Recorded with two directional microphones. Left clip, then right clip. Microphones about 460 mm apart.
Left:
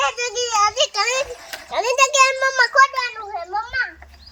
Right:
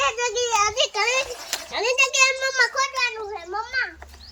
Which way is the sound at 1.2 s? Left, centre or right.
Centre.